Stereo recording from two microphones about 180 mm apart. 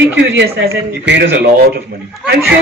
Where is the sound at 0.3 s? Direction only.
60° right (ahead or behind).